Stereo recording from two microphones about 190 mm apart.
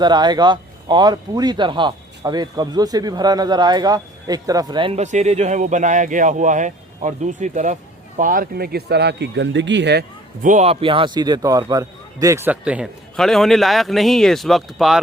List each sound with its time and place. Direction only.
0.0 s speech: 20° right (ahead or behind); by 10.0 s 65° right (ahead or behind)
10.4 s a man's voice: 40° right (ahead or behind); by 15.0 s centre (ahead or behind)